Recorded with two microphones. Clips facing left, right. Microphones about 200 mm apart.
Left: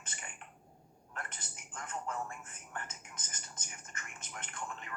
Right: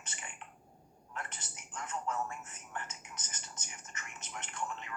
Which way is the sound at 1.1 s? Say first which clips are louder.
Right 1 dB; 50° left (ahead or behind).